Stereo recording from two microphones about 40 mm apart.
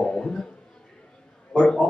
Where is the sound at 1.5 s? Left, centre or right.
Centre.